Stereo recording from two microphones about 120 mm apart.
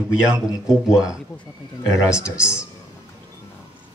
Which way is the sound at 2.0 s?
10° right (ahead or behind).